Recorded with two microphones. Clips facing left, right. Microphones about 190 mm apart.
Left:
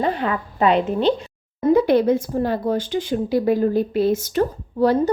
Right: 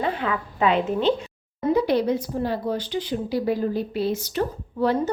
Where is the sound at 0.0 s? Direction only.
40° left (ahead or behind).